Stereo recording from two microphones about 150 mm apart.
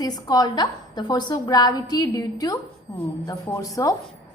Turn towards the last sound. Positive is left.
turn(degrees=20)  # may be behind; listen again after turning